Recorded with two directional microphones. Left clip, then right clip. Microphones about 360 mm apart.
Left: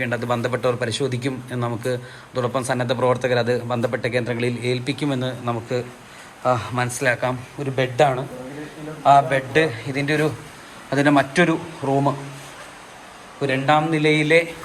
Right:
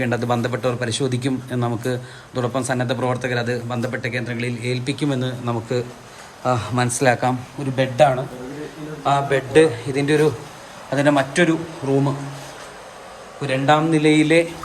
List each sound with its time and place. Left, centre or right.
0.0 s a man's voice: centre
13.4 s a man's voice: centre